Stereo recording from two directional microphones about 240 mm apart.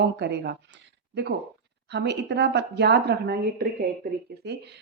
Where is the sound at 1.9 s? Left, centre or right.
Right.